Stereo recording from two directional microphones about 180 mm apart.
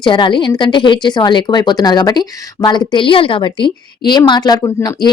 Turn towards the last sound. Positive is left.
turn(degrees=20)  # may be behind; listen again after turning